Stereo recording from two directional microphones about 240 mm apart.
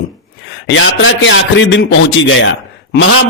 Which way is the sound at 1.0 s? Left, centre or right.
Left.